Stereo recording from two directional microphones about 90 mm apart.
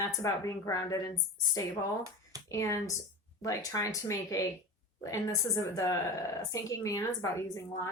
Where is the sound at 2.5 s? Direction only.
35° left (ahead or behind).